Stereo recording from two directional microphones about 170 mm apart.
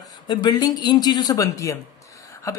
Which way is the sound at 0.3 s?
25° left (ahead or behind).